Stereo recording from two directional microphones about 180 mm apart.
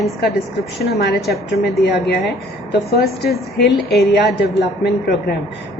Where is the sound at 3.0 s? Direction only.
65° left (ahead or behind).